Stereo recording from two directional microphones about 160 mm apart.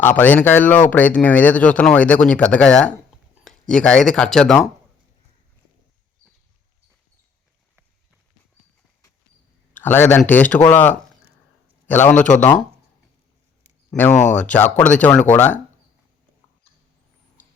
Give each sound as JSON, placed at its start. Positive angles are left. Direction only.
{"t": 0.0, "sound": "speech", "side_deg": 15}
{"t": 9.7, "sound": "speech", "side_deg": 10}
{"t": 13.9, "sound": "speech", "side_deg": 10}